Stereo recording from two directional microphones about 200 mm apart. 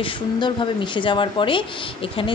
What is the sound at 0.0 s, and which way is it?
A woman's voice, 25° left (ahead or behind).